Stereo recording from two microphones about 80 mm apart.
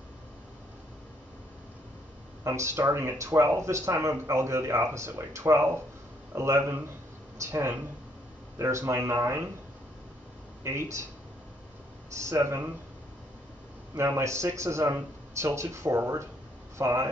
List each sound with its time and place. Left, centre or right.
2.4 s speech: right
10.6 s speech: right
12.2 s speech: right
13.9 s speech: right